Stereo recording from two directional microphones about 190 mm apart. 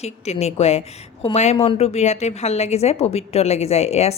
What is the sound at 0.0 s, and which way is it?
Speech, 35° left (ahead or behind).